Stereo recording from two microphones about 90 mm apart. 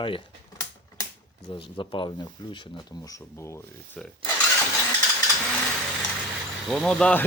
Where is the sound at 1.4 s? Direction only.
65° left (ahead or behind).